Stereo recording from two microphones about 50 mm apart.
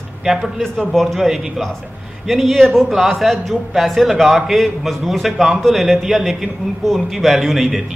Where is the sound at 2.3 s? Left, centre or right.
Centre.